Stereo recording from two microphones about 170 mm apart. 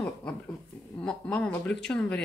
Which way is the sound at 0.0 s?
5° left (ahead or behind).